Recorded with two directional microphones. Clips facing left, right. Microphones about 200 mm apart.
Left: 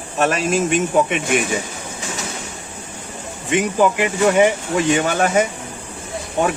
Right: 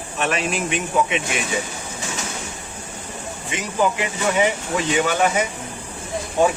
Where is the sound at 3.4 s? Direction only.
55° left (ahead or behind).